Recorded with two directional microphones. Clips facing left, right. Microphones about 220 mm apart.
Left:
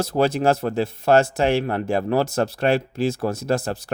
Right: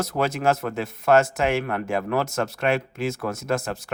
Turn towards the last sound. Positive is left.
turn(degrees=35)  # may be behind; listen again after turning